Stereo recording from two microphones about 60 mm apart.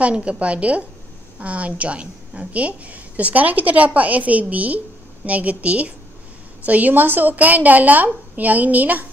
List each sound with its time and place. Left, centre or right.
0.0 s a woman's voice: centre